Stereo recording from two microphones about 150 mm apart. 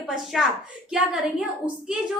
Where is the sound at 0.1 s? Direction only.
5° right (ahead or behind).